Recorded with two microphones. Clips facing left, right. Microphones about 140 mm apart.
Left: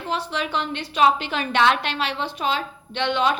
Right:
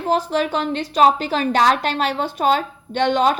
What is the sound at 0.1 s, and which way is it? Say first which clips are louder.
A woman's voice: right 7 dB; 40° right (ahead or behind).